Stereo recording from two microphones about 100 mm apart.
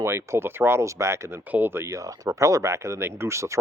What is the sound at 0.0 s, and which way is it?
Speech, 25° right (ahead or behind).